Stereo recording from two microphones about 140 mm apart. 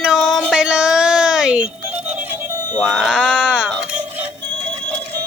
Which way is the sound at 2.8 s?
Centre (ahead or behind).